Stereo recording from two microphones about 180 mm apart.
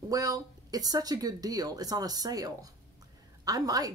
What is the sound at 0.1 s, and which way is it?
Speech, 20° right (ahead or behind).